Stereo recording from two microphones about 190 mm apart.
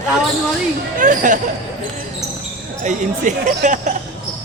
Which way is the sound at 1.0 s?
40° right (ahead or behind).